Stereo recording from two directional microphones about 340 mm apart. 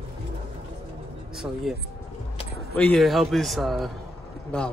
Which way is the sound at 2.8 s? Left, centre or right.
Centre.